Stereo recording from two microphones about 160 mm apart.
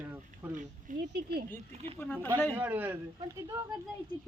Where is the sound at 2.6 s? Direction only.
10° right (ahead or behind).